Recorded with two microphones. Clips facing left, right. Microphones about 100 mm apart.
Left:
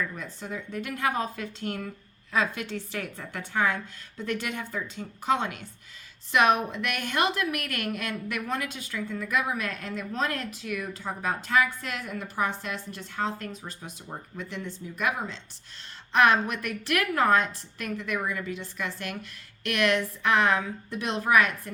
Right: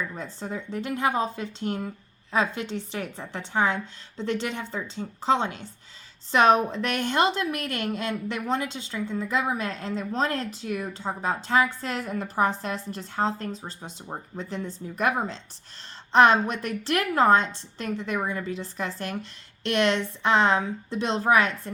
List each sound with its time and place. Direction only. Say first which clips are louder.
0.2 s a woman's voice: right 3 dB; 30° right (ahead or behind)